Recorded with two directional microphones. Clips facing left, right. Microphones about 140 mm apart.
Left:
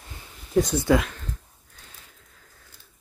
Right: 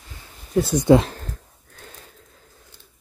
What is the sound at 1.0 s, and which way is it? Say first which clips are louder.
Speech: right 4 dB; 35° right (ahead or behind).